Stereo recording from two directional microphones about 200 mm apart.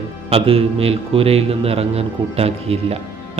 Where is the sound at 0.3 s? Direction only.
30° right (ahead or behind).